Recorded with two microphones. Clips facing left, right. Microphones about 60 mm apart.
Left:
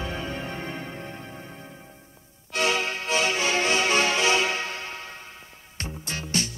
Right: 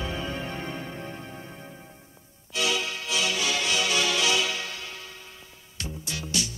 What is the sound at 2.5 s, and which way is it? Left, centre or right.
Music, left.